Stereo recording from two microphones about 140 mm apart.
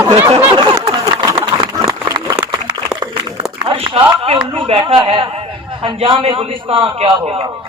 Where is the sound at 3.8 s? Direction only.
40° right (ahead or behind).